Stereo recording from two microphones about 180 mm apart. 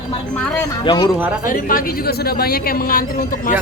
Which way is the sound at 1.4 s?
55° left (ahead or behind).